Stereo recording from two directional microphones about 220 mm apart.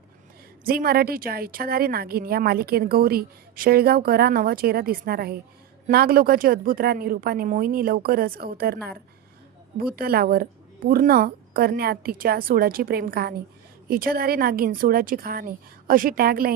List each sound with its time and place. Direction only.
0.6 s a woman's voice: 40° right (ahead or behind)